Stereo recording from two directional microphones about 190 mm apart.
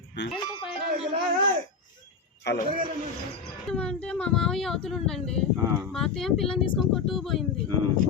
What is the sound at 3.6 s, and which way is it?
Speech, 5° left (ahead or behind).